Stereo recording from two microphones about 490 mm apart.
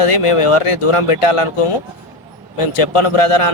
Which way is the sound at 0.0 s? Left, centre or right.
Left.